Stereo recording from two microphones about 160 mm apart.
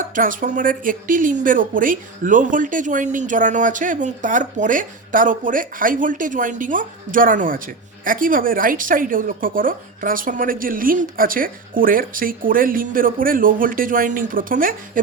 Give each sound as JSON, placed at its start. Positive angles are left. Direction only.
{"t": 0.1, "sound": "a woman's voice", "side_deg": -55}